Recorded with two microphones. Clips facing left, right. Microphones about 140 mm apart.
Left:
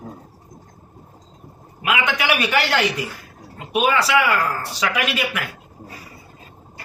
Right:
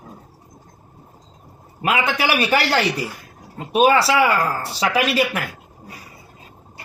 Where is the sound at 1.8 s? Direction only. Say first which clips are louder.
Right 2 dB; 35° right (ahead or behind).